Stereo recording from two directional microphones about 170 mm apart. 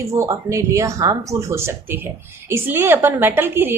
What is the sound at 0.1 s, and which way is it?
A woman's voice, 15° right (ahead or behind).